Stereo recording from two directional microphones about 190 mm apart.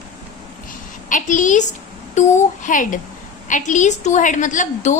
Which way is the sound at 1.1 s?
40° left (ahead or behind).